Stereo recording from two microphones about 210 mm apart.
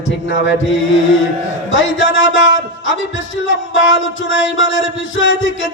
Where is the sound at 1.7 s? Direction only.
65° left (ahead or behind).